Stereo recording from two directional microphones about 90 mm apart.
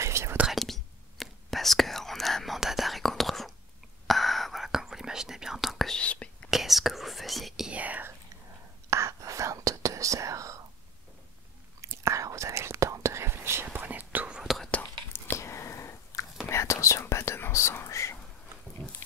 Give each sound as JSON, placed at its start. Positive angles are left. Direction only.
{"t": 0.0, "sound": "whispering", "side_deg": -30}
{"t": 0.5, "sound": "whispering", "side_deg": 0}
{"t": 5.9, "sound": "whispering", "side_deg": 15}
{"t": 6.5, "sound": "whispering", "side_deg": 0}
{"t": 7.7, "sound": "whispering", "side_deg": -15}
{"t": 8.9, "sound": "whispering", "side_deg": -35}
{"t": 11.8, "sound": "whispering", "side_deg": -35}
{"t": 14.4, "sound": "whispering", "side_deg": 0}
{"t": 14.7, "sound": "whispering", "side_deg": 20}